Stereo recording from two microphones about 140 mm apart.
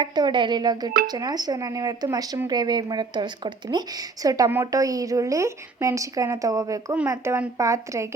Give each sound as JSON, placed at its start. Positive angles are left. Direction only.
{"t": 0.0, "sound": "a woman's voice", "side_deg": -30}